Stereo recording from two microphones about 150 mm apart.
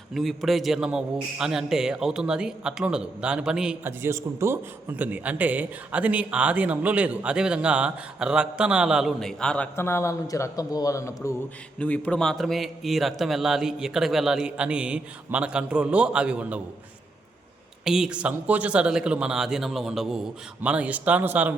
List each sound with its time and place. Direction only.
0.1 s a man's voice: centre (ahead or behind)
3.8 s a man's voice: 20° right (ahead or behind); by 9.6 s 5° left (ahead or behind)
9.7 s speech: 15° left (ahead or behind)
11.8 s a man's voice: 10° left (ahead or behind); by 16.6 s 10° right (ahead or behind)
17.8 s a man's voice: 5° right (ahead or behind)